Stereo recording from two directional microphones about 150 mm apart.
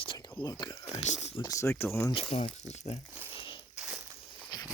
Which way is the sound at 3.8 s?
5° right (ahead or behind).